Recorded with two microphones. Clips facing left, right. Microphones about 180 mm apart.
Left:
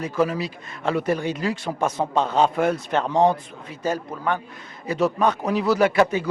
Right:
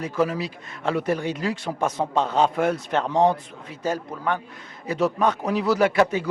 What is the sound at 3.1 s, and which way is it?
Speech, 30° left (ahead or behind).